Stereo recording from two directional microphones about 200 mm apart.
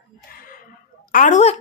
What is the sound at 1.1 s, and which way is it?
Speech, 40° left (ahead or behind).